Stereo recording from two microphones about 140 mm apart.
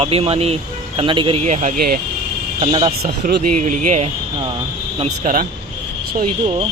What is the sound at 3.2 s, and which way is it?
Speech, 65° right (ahead or behind).